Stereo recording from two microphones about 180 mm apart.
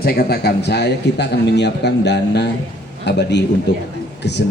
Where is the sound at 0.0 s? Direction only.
55° left (ahead or behind).